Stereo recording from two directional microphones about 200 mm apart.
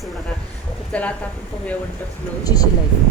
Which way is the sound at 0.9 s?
5° left (ahead or behind).